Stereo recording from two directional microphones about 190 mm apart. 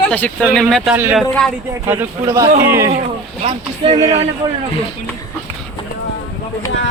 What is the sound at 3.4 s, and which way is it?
Speech, 30° right (ahead or behind).